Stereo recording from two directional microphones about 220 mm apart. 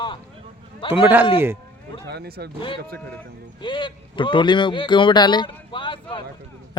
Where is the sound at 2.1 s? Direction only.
45° right (ahead or behind).